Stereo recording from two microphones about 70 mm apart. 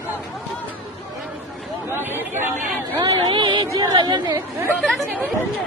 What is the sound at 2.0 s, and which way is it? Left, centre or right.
Chatter, right.